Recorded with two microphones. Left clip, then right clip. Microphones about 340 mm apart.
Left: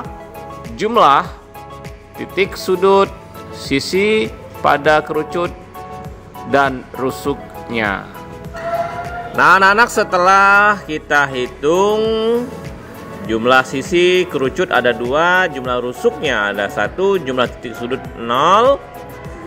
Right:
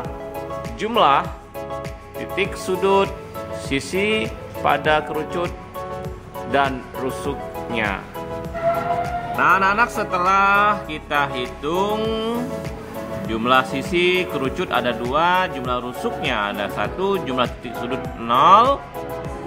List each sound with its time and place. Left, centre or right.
0.7 s speech: centre
2.3 s speech: centre
6.5 s speech: centre
9.4 s speech: left